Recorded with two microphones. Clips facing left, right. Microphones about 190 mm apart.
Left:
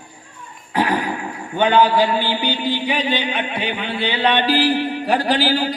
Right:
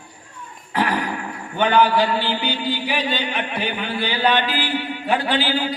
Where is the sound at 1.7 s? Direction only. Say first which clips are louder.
Left 2 dB; 15° left (ahead or behind).